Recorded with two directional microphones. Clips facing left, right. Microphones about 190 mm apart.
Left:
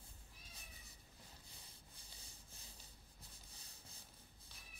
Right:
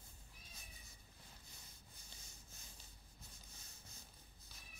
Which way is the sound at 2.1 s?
35° left (ahead or behind).